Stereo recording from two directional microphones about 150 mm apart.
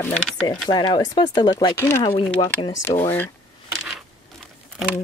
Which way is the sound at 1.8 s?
15° left (ahead or behind).